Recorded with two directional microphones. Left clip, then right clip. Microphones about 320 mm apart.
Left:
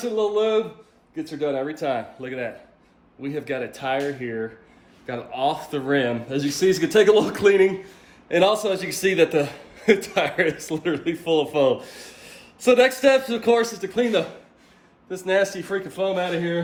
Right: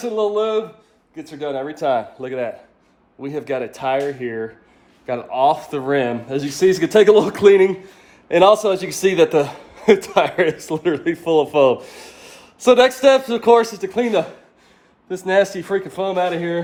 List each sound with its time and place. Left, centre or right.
0.0 s a man's voice: centre